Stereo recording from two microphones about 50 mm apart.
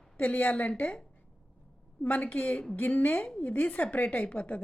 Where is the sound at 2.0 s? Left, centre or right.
Left.